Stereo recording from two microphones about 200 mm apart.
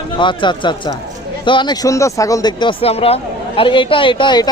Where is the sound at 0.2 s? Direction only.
25° left (ahead or behind).